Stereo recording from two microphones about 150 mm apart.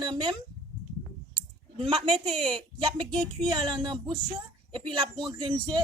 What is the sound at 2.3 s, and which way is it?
A woman's voice, 35° right (ahead or behind).